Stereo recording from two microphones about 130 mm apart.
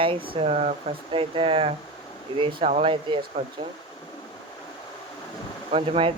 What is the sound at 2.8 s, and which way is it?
Speech, 40° right (ahead or behind).